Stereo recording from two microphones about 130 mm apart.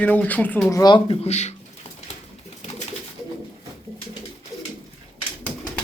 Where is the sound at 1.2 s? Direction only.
60° left (ahead or behind).